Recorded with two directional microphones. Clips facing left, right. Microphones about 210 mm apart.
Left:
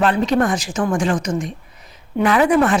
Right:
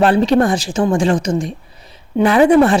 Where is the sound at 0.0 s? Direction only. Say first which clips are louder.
Right 4 dB; 30° right (ahead or behind).